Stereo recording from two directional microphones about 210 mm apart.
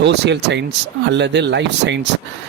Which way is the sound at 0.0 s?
55° right (ahead or behind).